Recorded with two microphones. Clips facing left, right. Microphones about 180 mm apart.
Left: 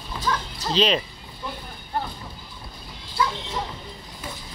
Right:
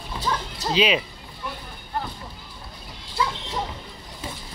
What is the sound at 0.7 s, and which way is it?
Speech, 10° right (ahead or behind).